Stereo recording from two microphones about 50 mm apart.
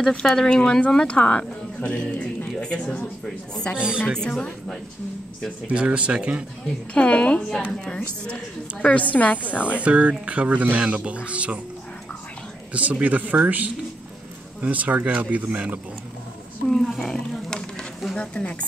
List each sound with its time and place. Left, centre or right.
0.0 s speech: centre
3.7 s speech: centre
5.7 s speech: right
6.9 s speech: left
8.8 s a woman's voice: left
9.6 s speech: right
12.7 s speech: right
16.6 s speech: centre
18.1 s speech: left